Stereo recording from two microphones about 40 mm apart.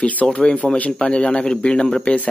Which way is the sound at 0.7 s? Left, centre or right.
Left.